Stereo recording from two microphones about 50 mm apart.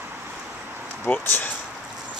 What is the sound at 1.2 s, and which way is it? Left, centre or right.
Speech, left.